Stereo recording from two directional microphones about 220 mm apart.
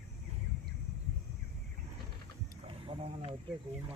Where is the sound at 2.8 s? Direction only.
25° right (ahead or behind).